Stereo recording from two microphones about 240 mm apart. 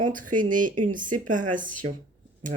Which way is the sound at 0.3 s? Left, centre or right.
Right.